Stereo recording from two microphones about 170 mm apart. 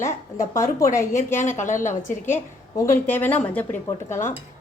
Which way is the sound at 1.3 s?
45° left (ahead or behind).